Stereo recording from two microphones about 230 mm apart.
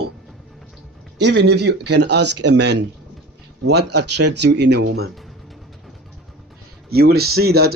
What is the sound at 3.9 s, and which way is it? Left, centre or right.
Speech, right.